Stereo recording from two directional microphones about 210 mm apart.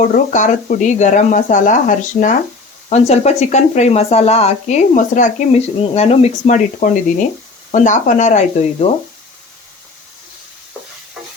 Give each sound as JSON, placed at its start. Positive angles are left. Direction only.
{"t": 0.1, "sound": "speech", "side_deg": 35}